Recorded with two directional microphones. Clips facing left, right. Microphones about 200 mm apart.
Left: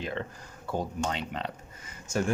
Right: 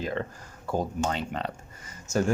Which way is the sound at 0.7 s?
45° right (ahead or behind).